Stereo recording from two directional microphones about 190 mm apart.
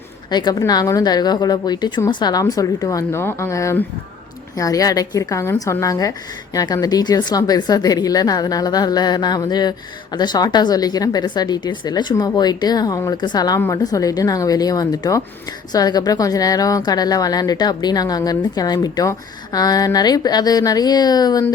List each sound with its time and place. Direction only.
0.3 s a woman's voice: 20° left (ahead or behind)